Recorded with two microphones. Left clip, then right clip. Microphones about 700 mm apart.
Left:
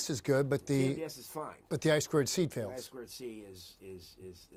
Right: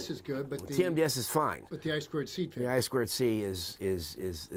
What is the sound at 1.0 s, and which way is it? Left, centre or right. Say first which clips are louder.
Speech: right 12 dB; right.